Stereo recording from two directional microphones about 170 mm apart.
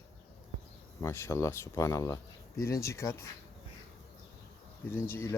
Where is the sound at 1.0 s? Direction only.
15° left (ahead or behind).